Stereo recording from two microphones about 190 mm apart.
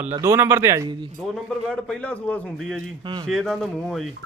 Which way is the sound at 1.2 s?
Centre (ahead or behind).